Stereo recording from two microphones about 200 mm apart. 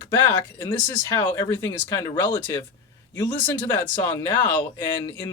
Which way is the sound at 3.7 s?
15° left (ahead or behind).